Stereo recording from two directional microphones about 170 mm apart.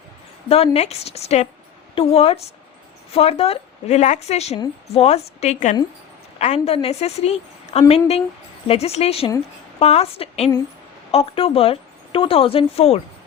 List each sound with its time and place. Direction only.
0.4 s a woman's voice: 35° left (ahead or behind)